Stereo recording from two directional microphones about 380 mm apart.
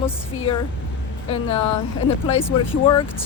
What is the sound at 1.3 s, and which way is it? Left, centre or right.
Speech, centre.